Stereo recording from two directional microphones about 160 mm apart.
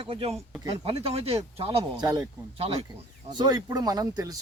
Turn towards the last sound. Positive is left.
turn(degrees=-25)  # may be behind; listen again after turning